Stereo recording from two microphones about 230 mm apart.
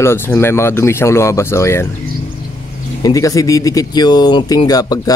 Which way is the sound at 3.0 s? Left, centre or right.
Centre.